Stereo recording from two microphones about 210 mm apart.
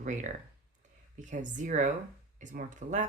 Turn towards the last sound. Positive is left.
turn(degrees=-35)  # may be behind; listen again after turning